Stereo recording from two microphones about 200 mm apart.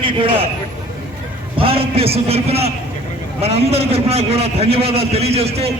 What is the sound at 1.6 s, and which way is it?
A man's voice, 30° right (ahead or behind).